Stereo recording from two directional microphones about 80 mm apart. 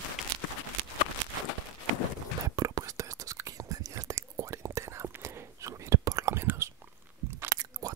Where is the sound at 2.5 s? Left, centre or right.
Right.